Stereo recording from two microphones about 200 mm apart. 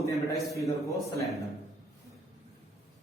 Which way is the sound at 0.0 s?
15° left (ahead or behind).